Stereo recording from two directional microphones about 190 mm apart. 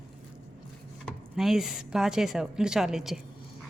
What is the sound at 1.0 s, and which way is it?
Speech, centre (ahead or behind).